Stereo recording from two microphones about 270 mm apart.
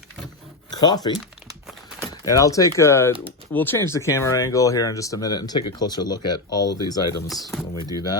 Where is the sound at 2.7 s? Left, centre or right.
Centre.